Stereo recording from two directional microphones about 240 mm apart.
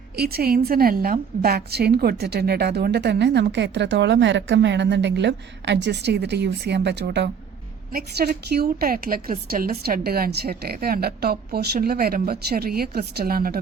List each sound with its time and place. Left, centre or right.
0.2 s a woman's voice: right